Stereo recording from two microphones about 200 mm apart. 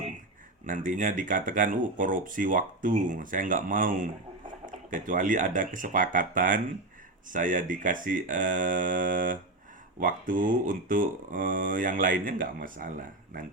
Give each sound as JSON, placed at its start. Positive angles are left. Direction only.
{"t": 0.6, "sound": "speech", "side_deg": -40}